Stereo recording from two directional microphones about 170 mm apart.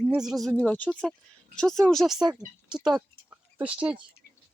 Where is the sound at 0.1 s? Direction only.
5° right (ahead or behind).